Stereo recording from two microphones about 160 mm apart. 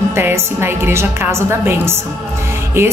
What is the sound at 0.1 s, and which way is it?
A woman's voice, 15° right (ahead or behind).